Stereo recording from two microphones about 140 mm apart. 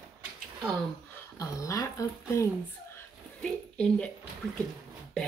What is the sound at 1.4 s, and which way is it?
Speech, 25° left (ahead or behind).